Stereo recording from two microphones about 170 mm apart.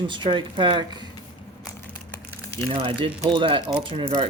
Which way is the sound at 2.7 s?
30° right (ahead or behind).